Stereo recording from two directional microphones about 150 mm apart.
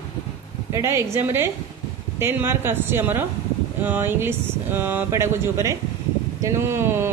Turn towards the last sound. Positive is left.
turn(degrees=-15)  # may be behind; listen again after turning